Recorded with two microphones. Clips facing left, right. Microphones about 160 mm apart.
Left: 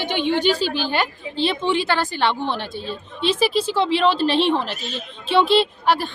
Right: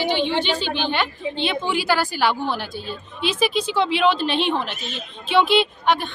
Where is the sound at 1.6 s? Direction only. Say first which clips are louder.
Right 2 dB; 25° left (ahead or behind).